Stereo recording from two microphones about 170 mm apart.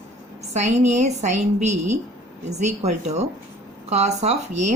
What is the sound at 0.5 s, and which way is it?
A woman's voice, 40° right (ahead or behind).